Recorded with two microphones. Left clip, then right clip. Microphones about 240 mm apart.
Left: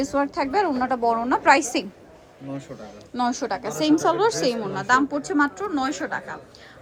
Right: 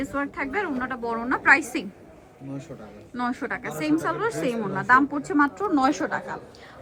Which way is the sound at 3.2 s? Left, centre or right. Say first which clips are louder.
Left 4 dB; centre.